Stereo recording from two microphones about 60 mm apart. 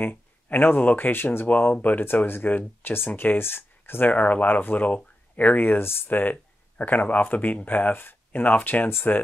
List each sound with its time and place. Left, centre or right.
0.0 s speech: left
3.1 s speech: left
3.3 s speech: left
4.1 s speech: left